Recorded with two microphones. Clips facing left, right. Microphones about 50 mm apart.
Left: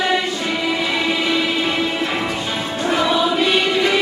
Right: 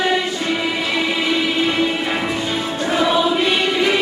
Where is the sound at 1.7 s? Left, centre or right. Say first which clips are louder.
Right 1 dB; centre.